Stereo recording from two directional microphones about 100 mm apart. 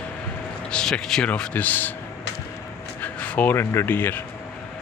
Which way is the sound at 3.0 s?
15° left (ahead or behind).